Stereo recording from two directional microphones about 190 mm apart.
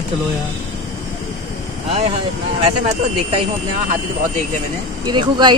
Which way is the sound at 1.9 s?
30° right (ahead or behind).